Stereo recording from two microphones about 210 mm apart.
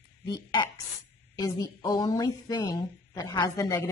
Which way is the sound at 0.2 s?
20° left (ahead or behind).